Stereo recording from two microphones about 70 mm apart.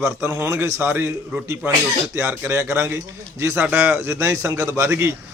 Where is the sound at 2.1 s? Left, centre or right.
Right.